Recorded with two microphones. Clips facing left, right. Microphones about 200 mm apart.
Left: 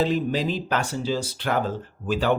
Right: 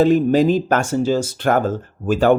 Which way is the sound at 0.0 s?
50° right (ahead or behind).